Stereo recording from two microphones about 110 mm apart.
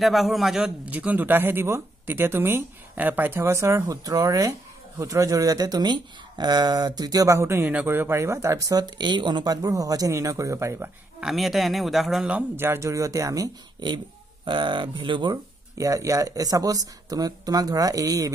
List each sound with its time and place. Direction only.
0.0 s a man's voice: centre (ahead or behind); by 10.9 s 25° right (ahead or behind)
11.1 s a man's voice: centre (ahead or behind); by 15.3 s 45° right (ahead or behind)
15.8 s speech: 30° right (ahead or behind)